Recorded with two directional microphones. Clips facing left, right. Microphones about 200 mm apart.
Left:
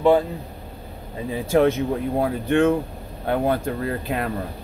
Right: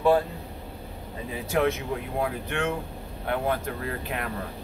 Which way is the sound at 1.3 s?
30° left (ahead or behind).